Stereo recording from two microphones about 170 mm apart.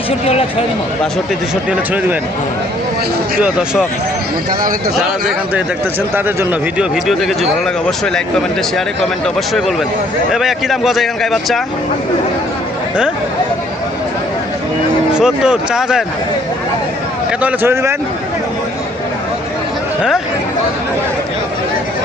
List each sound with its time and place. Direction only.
0.1 s speech: 35° left (ahead or behind)
6.1 s speech: 10° right (ahead or behind)
9.2 s speech: centre (ahead or behind)
15.1 s speech: 5° right (ahead or behind)
17.4 s speech: 15° right (ahead or behind)
20.0 s speech: 5° right (ahead or behind)